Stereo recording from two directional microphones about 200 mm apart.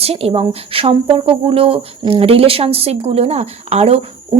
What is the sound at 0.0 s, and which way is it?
Speech, 30° right (ahead or behind).